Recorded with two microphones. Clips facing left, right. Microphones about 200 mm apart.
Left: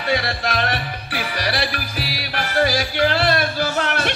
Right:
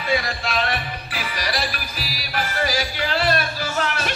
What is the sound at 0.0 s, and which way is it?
Music, 80° left.